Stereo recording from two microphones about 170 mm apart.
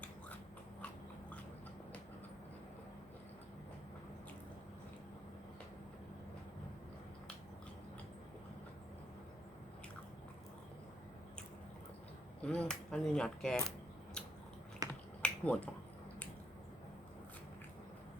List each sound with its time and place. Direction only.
12.4 s speech: 5° left (ahead or behind)
14.8 s finger snapping: 20° right (ahead or behind)
15.2 s finger snapping: 10° left (ahead or behind)